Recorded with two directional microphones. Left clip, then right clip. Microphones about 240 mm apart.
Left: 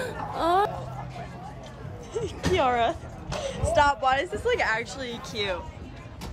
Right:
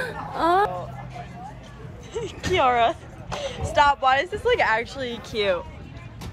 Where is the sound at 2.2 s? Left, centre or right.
Centre.